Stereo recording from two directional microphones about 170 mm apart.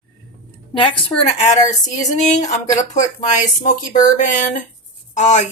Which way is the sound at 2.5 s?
45° left (ahead or behind).